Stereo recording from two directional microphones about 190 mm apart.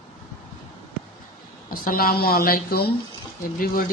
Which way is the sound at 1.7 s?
50° left (ahead or behind).